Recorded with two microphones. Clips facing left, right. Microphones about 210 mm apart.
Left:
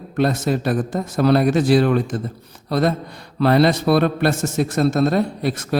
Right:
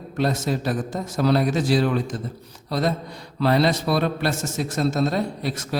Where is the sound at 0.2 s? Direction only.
60° left (ahead or behind).